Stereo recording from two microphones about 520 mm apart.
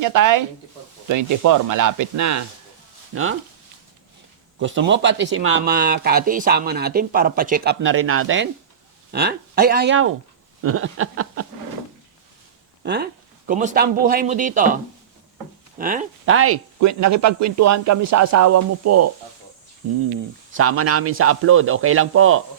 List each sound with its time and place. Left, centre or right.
0.0 s speech: right
4.6 s speech: right
12.8 s speech: centre
15.8 s speech: centre
20.6 s speech: right